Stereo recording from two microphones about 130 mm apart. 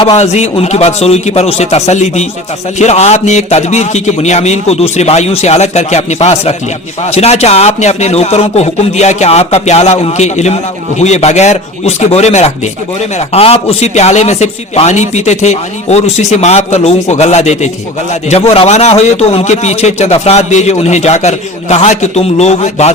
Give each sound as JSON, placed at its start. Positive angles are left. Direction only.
{"t": 0.2, "sound": "a man's voice", "side_deg": 60}